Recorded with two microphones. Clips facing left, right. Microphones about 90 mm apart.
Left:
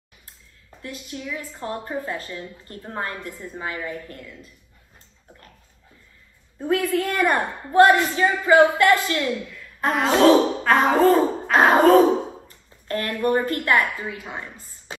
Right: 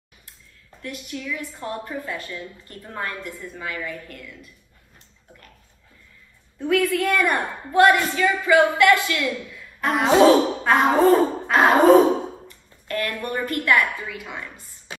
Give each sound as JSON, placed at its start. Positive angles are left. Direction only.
{"t": 0.8, "sound": "a woman's voice", "side_deg": 25}
{"t": 6.6, "sound": "a woman's voice", "side_deg": 35}
{"t": 9.9, "sound": "speech", "side_deg": -10}
{"t": 11.7, "sound": "sigh", "side_deg": 0}
{"t": 12.4, "sound": "a woman's voice", "side_deg": 30}